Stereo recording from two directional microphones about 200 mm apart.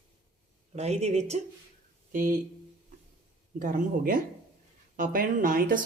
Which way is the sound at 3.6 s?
45° right (ahead or behind).